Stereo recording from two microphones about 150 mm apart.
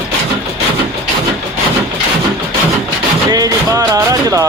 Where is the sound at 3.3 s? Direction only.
25° right (ahead or behind).